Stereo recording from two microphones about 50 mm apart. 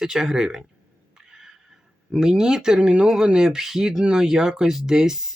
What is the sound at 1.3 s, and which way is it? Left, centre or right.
Neigh, centre.